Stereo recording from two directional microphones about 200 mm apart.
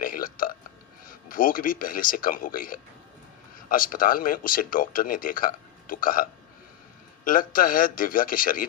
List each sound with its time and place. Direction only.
0.0 s burping: 45° left (ahead or behind)
1.3 s speech: 45° left (ahead or behind)
7.3 s speech: 45° left (ahead or behind)